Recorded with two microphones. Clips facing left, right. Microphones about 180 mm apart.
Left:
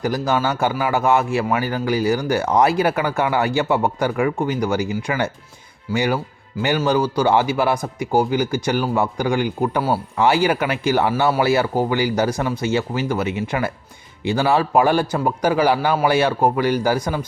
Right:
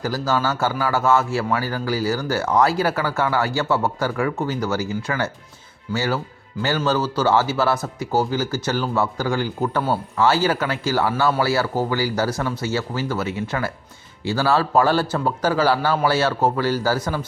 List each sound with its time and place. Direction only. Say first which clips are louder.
0.0 s a man's voice: left 2 dB; 15° left (ahead or behind)